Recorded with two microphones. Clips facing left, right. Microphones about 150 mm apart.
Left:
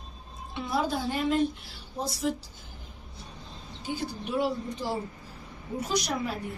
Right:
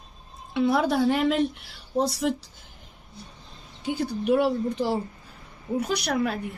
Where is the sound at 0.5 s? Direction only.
65° right (ahead or behind).